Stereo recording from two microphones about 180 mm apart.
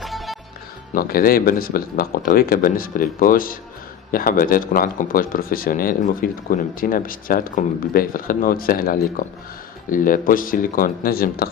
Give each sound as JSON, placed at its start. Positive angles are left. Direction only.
{"t": 0.0, "sound": "music", "side_deg": 0}
{"t": 0.9, "sound": "speech", "side_deg": 55}